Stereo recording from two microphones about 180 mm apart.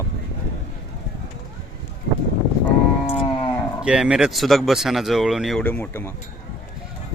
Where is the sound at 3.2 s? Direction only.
25° left (ahead or behind).